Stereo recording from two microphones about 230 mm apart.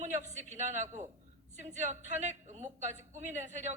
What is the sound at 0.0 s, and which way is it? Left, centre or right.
A woman's voice, right.